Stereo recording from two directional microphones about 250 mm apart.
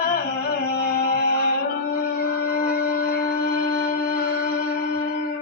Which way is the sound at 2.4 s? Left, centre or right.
Left.